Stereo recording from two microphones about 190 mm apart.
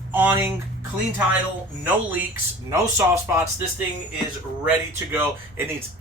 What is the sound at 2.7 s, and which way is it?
Speech, 15° right (ahead or behind).